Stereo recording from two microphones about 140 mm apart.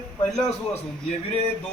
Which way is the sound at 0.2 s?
10° left (ahead or behind).